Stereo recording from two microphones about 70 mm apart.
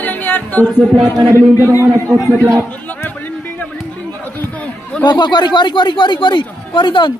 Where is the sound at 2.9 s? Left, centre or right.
Left.